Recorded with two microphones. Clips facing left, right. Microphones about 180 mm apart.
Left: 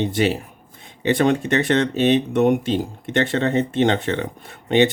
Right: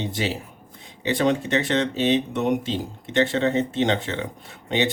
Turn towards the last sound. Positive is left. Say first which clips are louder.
# left 7 dB
turn(degrees=60)  # may be behind; listen again after turning